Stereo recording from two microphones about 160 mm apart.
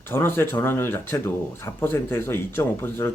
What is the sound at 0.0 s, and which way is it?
Speech, 15° left (ahead or behind).